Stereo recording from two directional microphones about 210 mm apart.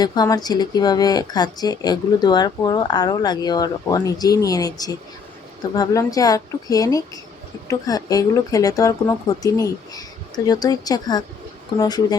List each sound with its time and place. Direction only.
0.0 s speech: 20° left (ahead or behind)